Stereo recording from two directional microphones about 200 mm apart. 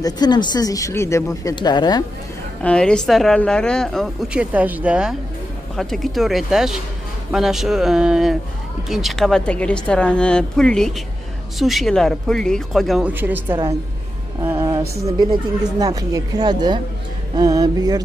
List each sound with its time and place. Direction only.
0.0 s speech: 20° left (ahead or behind)
2.6 s a woman's voice: 5° left (ahead or behind); by 18.0 s 20° right (ahead or behind)